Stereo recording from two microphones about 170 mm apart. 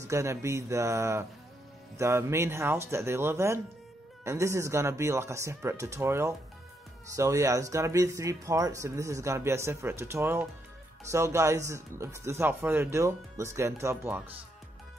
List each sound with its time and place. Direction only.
0.1 s speech: 15° right (ahead or behind)